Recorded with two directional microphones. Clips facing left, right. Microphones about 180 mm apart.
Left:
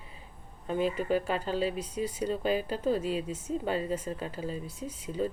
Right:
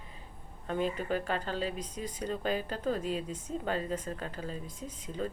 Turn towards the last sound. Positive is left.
turn(degrees=10)  # may be behind; listen again after turning